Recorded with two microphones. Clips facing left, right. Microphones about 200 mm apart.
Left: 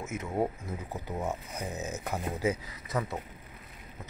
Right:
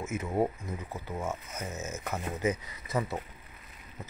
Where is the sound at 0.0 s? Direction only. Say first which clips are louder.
Right 2 dB; centre (ahead or behind).